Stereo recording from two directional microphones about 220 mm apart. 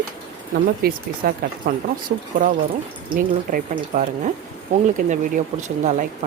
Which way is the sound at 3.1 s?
35° right (ahead or behind).